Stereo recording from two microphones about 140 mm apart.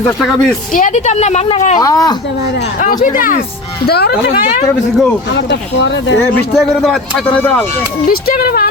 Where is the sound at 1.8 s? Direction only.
25° left (ahead or behind).